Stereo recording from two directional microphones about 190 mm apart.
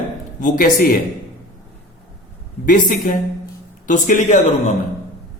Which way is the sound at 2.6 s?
45° left (ahead or behind).